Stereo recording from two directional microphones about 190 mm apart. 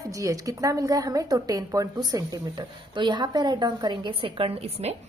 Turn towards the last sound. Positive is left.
turn(degrees=-30)  # may be behind; listen again after turning